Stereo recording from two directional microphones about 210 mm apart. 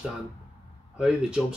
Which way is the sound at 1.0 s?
5° right (ahead or behind).